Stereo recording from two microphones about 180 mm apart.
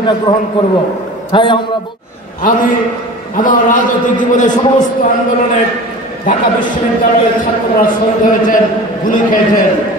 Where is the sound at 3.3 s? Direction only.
50° left (ahead or behind).